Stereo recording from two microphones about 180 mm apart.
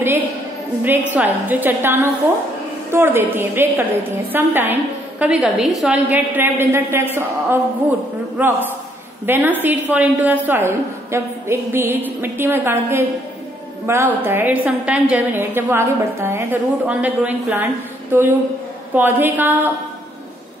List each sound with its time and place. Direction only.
0.8 s a woman's voice: 10° right (ahead or behind)